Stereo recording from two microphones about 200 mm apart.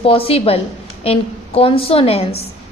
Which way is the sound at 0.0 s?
30° left (ahead or behind).